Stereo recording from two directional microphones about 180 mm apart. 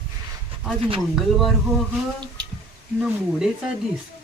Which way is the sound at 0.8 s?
30° right (ahead or behind).